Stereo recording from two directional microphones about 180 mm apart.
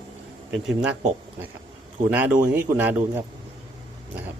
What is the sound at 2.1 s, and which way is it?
A man's voice, 10° right (ahead or behind).